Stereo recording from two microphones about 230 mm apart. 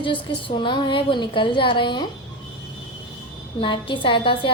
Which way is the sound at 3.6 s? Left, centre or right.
Left.